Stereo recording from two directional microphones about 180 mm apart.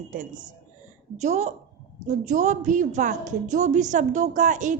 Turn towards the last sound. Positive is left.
turn(degrees=-45)  # may be behind; listen again after turning